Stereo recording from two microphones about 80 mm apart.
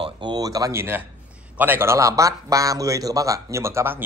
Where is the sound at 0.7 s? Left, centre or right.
Right.